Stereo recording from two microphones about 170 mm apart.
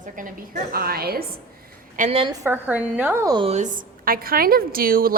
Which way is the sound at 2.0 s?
35° right (ahead or behind).